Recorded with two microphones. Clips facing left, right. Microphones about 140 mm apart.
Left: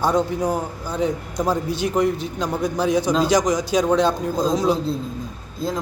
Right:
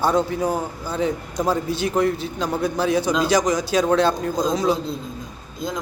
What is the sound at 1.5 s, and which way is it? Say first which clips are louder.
A man's voice: even; 15° left (ahead or behind).